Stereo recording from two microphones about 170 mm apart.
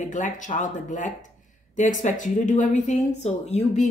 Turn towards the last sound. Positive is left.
turn(degrees=45)  # may be behind; listen again after turning